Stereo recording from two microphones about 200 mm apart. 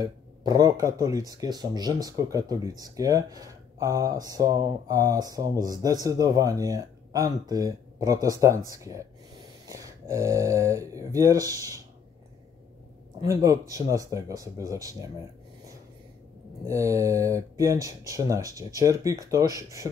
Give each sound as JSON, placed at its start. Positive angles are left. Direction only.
{"t": 0.0, "sound": "speech", "side_deg": -20}
{"t": 13.2, "sound": "speech", "side_deg": -15}
{"t": 16.6, "sound": "speech", "side_deg": -15}